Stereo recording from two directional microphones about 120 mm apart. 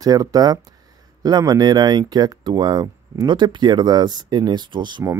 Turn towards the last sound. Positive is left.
turn(degrees=-40)  # may be behind; listen again after turning